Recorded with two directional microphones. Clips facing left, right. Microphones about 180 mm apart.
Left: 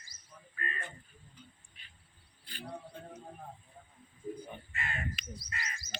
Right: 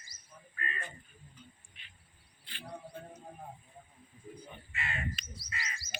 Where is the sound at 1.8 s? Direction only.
40° left (ahead or behind).